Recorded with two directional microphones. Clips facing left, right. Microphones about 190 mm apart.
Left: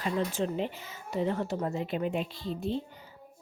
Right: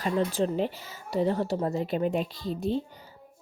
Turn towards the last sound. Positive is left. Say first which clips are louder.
# right 4 dB
turn(degrees=-40)  # may be behind; listen again after turning